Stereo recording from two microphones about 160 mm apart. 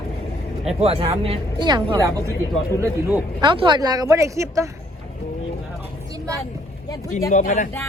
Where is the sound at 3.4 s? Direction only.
30° right (ahead or behind).